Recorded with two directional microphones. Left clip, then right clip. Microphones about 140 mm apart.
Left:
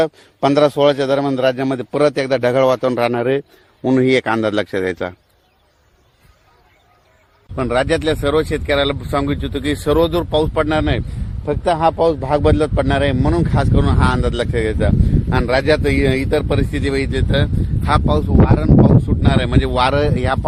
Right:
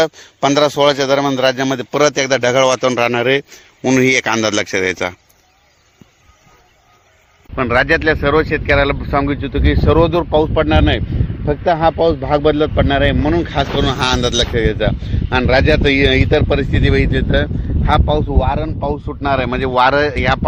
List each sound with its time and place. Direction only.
0.0 s a man's voice: centre (ahead or behind)
7.5 s speech: 5° right (ahead or behind); by 10.7 s 30° right (ahead or behind)
10.7 s speech: 45° right (ahead or behind)
13.7 s speech: 70° right (ahead or behind)
14.5 s speech: 50° right (ahead or behind)
19.0 s speech: 25° right (ahead or behind)